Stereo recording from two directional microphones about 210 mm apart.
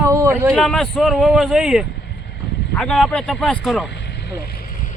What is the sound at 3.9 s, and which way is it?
Vehicle, 55° left (ahead or behind).